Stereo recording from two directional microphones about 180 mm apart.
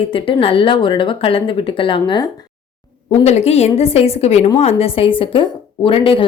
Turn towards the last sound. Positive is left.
turn(degrees=30)  # may be behind; listen again after turning